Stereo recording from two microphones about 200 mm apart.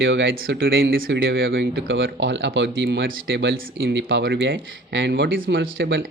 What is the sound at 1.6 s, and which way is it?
Speech, 60° right (ahead or behind).